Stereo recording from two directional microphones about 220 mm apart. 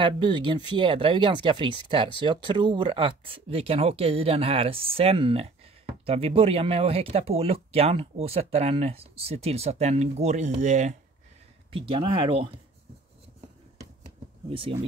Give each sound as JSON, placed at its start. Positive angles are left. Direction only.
{"t": 0.0, "sound": "speech", "side_deg": -20}
{"t": 14.5, "sound": "speech", "side_deg": -25}